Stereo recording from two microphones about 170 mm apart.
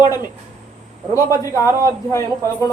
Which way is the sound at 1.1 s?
20° left (ahead or behind).